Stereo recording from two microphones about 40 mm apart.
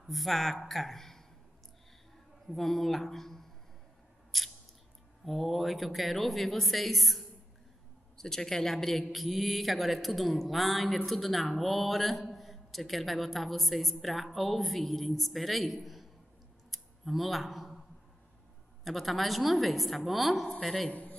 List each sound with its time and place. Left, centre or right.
0.0 s a man's voice: centre
2.5 s speech: centre
4.3 s scissors: centre
5.2 s a man's voice: centre
8.2 s a man's voice: centre
16.7 s a sound: centre
18.9 s a man's voice: centre
20.9 s a sound: left